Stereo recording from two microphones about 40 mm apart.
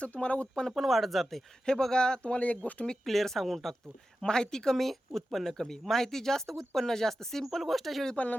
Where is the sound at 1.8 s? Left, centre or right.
Centre.